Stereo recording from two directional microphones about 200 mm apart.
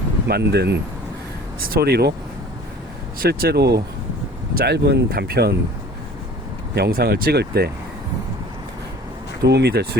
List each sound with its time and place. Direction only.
0.3 s speech: 55° right (ahead or behind)
3.2 s speech: 50° right (ahead or behind)
6.7 s speech: 50° right (ahead or behind)
9.4 s speech: 55° right (ahead or behind)